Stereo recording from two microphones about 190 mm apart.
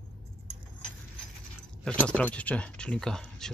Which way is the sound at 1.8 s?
5° left (ahead or behind).